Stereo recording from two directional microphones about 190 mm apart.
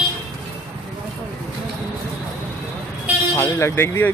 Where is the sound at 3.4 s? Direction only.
15° left (ahead or behind).